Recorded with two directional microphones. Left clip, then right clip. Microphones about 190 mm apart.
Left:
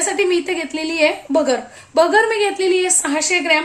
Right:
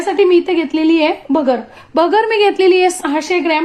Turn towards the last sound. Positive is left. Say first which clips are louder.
# right 1 dB
turn(degrees=-40)  # may be behind; listen again after turning